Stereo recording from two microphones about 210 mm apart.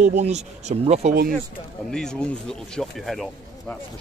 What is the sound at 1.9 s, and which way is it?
Speech, 5° left (ahead or behind).